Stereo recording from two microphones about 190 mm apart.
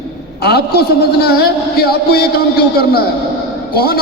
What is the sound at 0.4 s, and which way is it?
A man's voice, 55° left (ahead or behind).